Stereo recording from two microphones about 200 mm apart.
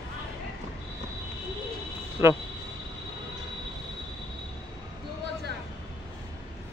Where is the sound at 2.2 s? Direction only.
15° right (ahead or behind).